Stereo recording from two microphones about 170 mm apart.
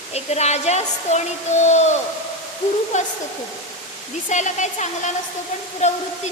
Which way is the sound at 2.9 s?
45° left (ahead or behind).